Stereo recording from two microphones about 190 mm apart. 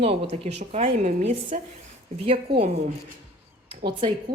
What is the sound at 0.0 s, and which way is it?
A woman's voice, 35° right (ahead or behind).